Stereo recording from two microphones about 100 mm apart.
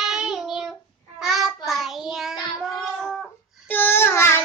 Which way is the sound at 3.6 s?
20° left (ahead or behind).